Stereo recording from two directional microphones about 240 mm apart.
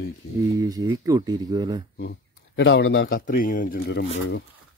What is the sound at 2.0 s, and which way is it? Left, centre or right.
Speech, left.